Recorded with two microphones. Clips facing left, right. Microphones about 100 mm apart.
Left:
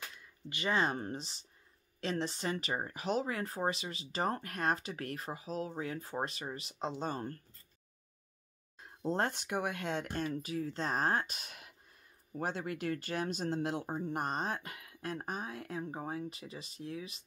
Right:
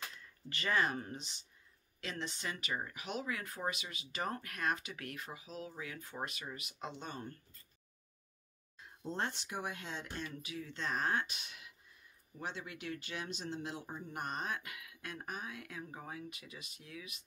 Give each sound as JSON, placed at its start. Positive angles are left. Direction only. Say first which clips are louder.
{"t": 0.2, "sound": "speech", "louder": "left 5 dB", "side_deg": 20}
{"t": 8.7, "sound": "speech", "louder": "left 7 dB", "side_deg": 45}
{"t": 14.0, "sound": "speech", "louder": "left 3 dB", "side_deg": 35}